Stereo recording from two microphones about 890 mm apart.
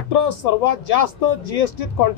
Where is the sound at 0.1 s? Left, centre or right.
Left.